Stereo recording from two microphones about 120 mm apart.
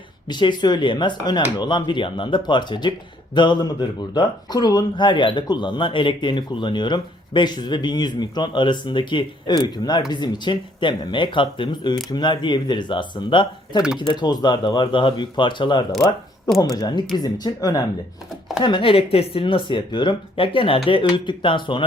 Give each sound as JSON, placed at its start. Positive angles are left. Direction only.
{"t": 0.3, "sound": "speech", "side_deg": 40}
{"t": 18.6, "sound": "speech", "side_deg": 45}